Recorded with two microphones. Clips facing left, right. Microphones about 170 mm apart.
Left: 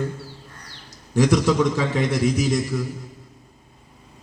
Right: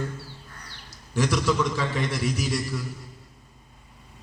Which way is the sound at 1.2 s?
50° left (ahead or behind).